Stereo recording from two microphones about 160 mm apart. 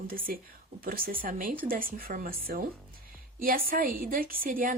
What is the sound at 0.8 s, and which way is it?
Speech, 65° right (ahead or behind).